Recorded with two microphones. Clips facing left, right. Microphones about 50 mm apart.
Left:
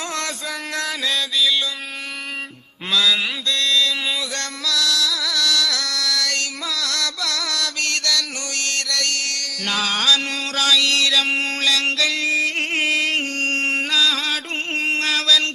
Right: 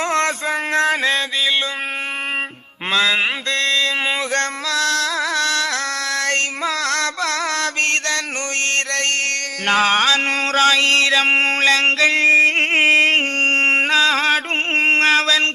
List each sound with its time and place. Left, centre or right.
0.0 s music: right
2.9 s mantra: right